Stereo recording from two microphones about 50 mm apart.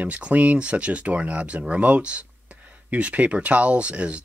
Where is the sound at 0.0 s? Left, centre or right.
Right.